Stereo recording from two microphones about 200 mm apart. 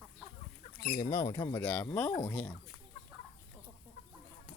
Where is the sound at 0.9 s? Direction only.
15° left (ahead or behind).